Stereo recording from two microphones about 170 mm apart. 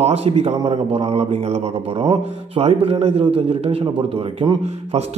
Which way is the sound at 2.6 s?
35° right (ahead or behind).